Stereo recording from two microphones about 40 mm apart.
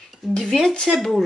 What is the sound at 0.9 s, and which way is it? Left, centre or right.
Speech, centre.